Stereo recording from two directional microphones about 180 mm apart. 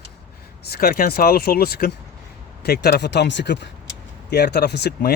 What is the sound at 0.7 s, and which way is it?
Speech, 55° left (ahead or behind).